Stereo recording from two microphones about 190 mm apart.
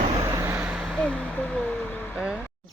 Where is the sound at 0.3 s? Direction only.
15° right (ahead or behind).